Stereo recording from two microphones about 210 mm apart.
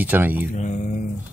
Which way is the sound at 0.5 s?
35° left (ahead or behind).